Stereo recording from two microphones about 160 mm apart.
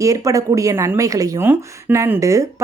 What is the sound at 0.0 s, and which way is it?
Speech, 20° right (ahead or behind).